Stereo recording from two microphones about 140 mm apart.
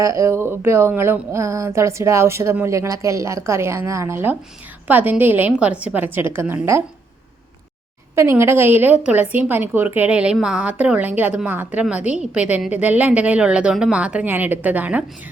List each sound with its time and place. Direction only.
0.0 s a woman's voice: 20° right (ahead or behind)
8.1 s a woman's voice: 20° right (ahead or behind)